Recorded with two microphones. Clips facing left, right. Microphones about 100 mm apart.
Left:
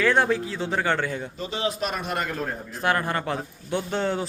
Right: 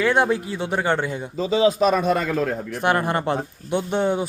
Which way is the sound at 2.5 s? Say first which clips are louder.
Right 7 dB; 75° right (ahead or behind).